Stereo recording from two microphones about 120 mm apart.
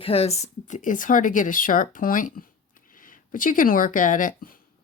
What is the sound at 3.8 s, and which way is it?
Speech, 90° left.